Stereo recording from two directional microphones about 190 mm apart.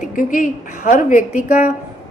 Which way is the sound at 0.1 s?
45° left (ahead or behind).